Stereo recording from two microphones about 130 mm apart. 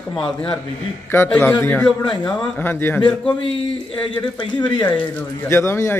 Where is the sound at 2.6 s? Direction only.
15° left (ahead or behind).